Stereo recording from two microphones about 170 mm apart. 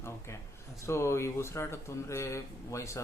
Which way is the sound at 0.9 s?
15° left (ahead or behind).